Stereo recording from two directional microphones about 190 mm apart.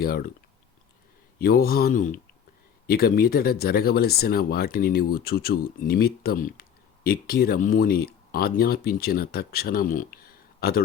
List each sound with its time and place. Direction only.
0.0 s speech: 50° left (ahead or behind)
1.4 s speech: 50° left (ahead or behind)